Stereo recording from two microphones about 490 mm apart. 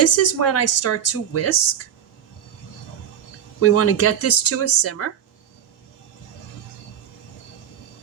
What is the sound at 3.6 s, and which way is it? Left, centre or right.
A woman's voice, left.